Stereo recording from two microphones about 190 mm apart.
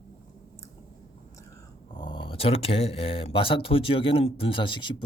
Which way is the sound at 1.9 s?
25° left (ahead or behind).